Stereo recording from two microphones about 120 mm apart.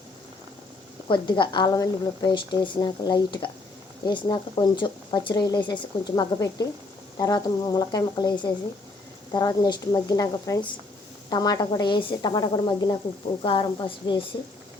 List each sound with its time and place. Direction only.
1.0 s a woman's voice: 45° left (ahead or behind)